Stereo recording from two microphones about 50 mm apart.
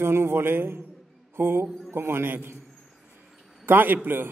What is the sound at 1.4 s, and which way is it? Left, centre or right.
Music, right.